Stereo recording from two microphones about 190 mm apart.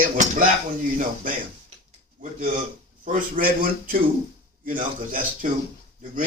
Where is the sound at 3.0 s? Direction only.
45° right (ahead or behind).